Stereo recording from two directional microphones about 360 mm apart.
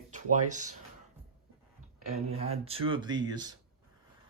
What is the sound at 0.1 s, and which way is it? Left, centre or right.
Speech, right.